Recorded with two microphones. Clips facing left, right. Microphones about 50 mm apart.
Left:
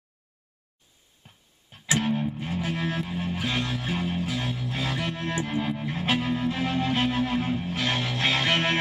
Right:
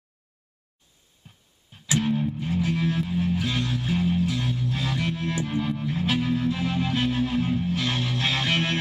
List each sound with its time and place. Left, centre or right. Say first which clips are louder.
1.9 s music: right 1 dB; left
4.3 s music: right 2 dB; centre
6.2 s music: right 2 dB; centre
6.5 s music: even; left